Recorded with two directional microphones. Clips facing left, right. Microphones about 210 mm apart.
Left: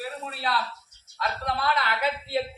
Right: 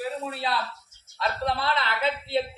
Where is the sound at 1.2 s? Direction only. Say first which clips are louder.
Right 2 dB; 25° right (ahead or behind).